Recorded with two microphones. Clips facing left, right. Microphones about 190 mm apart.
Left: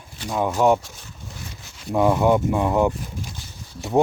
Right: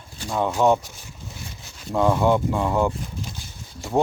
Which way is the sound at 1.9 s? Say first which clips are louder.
Left 2 dB; 15° left (ahead or behind).